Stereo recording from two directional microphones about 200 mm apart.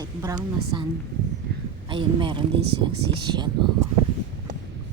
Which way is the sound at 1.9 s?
25° right (ahead or behind).